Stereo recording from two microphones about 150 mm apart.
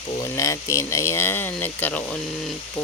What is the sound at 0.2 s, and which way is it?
Speech, 20° left (ahead or behind).